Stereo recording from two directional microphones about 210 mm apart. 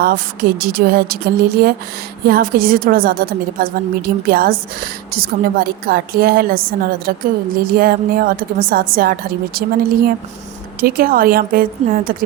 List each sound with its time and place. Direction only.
0.0 s a woman's voice: 45° right (ahead or behind)